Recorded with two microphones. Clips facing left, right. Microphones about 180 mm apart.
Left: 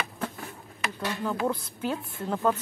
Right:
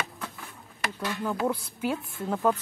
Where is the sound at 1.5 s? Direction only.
10° right (ahead or behind).